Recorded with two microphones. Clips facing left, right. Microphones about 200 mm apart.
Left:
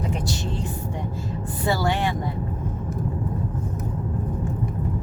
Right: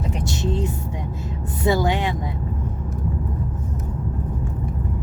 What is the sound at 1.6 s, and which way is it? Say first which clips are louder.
Vehicle: right 3 dB; 20° right (ahead or behind).